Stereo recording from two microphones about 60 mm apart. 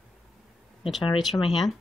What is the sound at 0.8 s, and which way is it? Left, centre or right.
Speech, centre.